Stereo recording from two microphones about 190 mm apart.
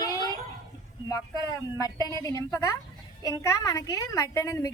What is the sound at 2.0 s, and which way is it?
Speech, 20° right (ahead or behind).